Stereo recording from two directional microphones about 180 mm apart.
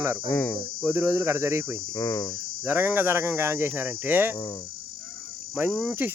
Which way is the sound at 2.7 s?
10° right (ahead or behind).